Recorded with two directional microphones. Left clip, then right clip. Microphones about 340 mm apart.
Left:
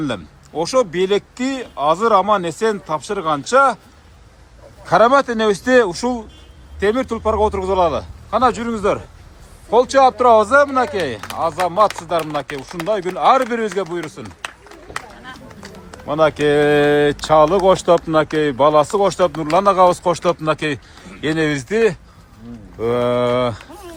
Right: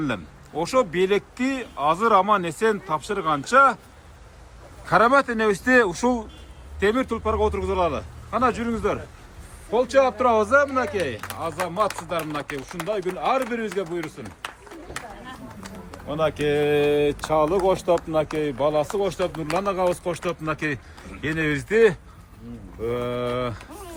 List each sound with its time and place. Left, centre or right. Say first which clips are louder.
0.0 s speech: left 4 dB; centre
4.9 s speech: left 5 dB; centre
15.9 s speech: left 9 dB; centre
22.8 s speech: left 9 dB; centre